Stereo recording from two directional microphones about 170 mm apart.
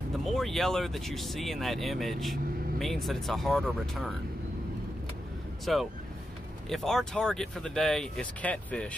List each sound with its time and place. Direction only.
0.2 s speech: centre (ahead or behind)
5.7 s speech: centre (ahead or behind)